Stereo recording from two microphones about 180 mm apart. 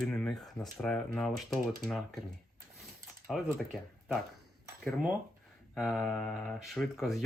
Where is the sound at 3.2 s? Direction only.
Centre (ahead or behind).